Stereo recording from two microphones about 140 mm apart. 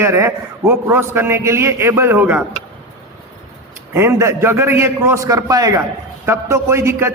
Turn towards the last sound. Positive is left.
turn(degrees=-20)  # may be behind; listen again after turning